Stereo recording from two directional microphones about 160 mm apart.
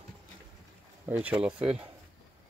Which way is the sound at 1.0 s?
10° right (ahead or behind).